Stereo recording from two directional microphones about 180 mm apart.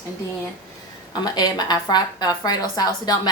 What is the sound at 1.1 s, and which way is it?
A woman's voice, 25° left (ahead or behind).